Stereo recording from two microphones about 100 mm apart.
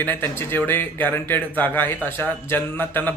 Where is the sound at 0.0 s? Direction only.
20° left (ahead or behind).